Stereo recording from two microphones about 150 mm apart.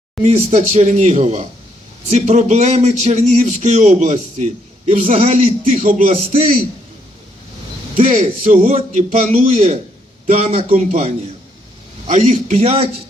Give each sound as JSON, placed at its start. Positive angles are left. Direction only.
{"t": 0.2, "sound": "a man's voice", "side_deg": -60}
{"t": 7.9, "sound": "a man's voice", "side_deg": -60}
{"t": 10.2, "sound": "a man's voice", "side_deg": -45}
{"t": 12.0, "sound": "a man's voice", "side_deg": -60}